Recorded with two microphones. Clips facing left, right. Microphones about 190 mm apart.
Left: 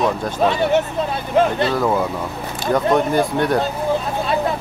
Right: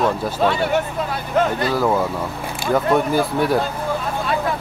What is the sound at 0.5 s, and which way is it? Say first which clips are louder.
Speech: left 3 dB; 20° left (ahead or behind).